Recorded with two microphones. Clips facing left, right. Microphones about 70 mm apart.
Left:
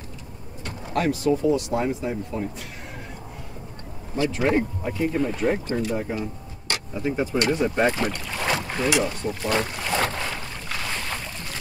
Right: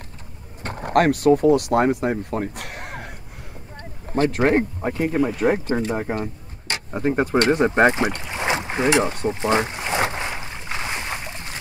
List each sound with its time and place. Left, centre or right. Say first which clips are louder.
0.7 s speech: right 7 dB; right
4.1 s speech: right 4 dB; right
5.5 s speech: right 3 dB; right
7.3 s speech: right 5 dB; right
9.2 s boat: right 4 dB; right